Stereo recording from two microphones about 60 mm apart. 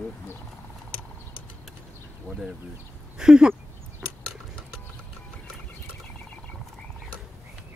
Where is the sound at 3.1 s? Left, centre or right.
Centre.